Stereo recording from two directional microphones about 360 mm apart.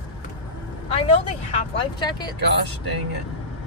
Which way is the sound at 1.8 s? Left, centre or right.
Centre.